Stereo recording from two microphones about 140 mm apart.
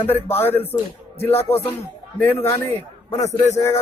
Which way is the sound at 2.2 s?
15° left (ahead or behind).